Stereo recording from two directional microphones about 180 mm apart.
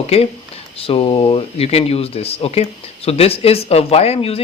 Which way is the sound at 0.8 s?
30° left (ahead or behind).